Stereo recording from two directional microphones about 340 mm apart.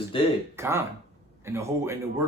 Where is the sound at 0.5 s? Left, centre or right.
Centre.